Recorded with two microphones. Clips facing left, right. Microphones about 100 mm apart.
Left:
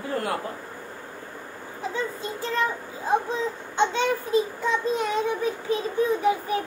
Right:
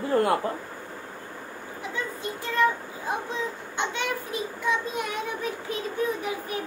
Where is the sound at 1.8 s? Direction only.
25° left (ahead or behind).